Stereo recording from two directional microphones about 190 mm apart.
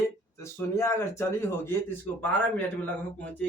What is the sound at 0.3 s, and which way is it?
Speech, 15° left (ahead or behind).